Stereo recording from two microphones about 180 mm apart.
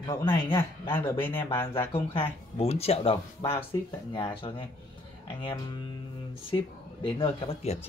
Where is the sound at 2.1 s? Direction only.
35° left (ahead or behind).